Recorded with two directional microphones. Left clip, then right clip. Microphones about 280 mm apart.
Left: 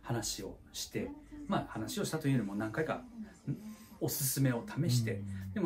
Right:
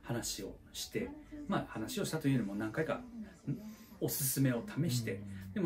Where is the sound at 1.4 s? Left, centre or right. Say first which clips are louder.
Left 2 dB; centre.